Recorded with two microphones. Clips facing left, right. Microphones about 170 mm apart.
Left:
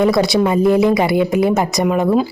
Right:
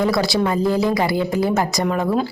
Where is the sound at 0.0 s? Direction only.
20° left (ahead or behind).